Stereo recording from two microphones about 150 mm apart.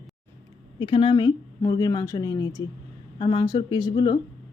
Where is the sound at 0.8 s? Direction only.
35° left (ahead or behind).